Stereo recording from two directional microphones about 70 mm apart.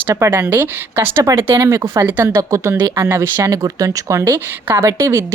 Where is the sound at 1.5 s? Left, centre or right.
Right.